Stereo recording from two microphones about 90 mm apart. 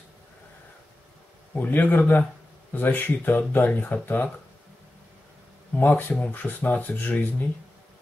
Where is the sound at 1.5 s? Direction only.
20° left (ahead or behind).